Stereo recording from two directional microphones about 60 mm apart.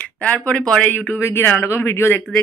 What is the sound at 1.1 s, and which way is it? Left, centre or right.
Speech, left.